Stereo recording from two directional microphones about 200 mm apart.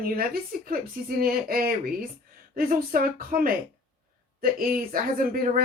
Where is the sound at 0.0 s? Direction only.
45° right (ahead or behind).